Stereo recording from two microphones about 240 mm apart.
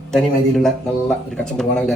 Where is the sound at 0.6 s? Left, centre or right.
Centre.